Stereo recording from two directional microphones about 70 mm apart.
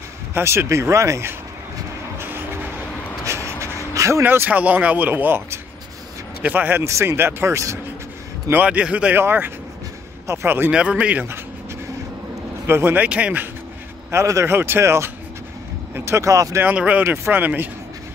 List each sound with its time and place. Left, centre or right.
0.3 s speech: right
2.1 s vehicle: right
3.3 s a sound: right
4.2 s speech: right
6.8 s speech: right
8.6 s speech: centre
9.1 s speech: right
10.7 s speech: centre
12.6 s speech: right
14.1 s speech: right
14.5 s speech: right
16.3 s speech: right
16.6 s speech: right
17.0 s speech: right